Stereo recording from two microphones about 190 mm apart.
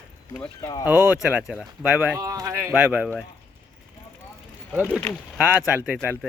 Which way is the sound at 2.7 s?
5° right (ahead or behind).